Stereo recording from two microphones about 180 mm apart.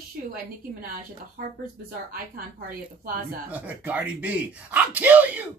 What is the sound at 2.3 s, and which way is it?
Speech, 55° right (ahead or behind).